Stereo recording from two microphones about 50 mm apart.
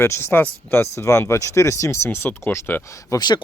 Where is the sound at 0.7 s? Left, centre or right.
Left.